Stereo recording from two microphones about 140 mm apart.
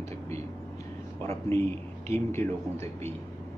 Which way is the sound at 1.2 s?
20° left (ahead or behind).